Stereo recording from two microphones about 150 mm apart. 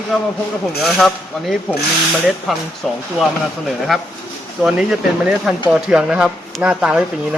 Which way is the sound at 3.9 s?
Centre (ahead or behind).